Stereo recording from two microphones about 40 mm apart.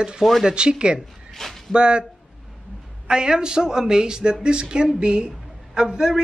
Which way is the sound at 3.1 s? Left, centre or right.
Centre.